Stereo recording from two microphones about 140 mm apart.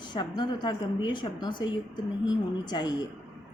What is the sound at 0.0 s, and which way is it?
A woman's voice, 30° left (ahead or behind).